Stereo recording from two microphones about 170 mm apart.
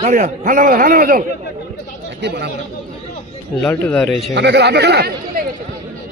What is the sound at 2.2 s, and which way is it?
Speech, 80° right.